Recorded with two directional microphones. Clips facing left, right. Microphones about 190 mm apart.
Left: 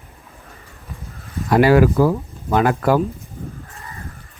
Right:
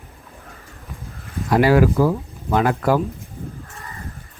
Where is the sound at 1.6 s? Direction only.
60° left (ahead or behind).